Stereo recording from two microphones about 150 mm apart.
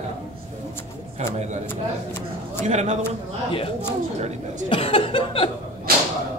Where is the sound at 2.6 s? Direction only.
50° right (ahead or behind).